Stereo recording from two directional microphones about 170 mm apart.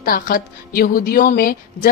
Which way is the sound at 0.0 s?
60° left (ahead or behind).